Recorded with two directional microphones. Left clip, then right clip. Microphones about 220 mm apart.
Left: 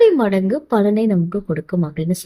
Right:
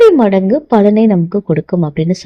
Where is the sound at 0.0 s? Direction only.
20° right (ahead or behind).